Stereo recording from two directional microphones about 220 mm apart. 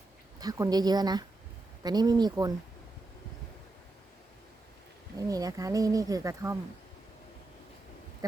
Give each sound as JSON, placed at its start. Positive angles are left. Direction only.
{"t": 0.3, "sound": "speech", "side_deg": -15}
{"t": 5.1, "sound": "speech", "side_deg": -15}